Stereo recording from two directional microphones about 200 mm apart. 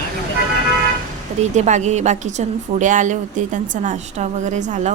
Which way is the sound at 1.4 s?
35° right (ahead or behind).